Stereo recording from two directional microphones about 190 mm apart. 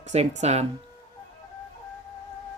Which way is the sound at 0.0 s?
35° right (ahead or behind).